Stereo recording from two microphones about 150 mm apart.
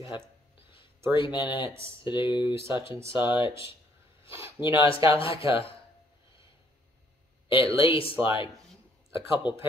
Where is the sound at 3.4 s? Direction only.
35° left (ahead or behind).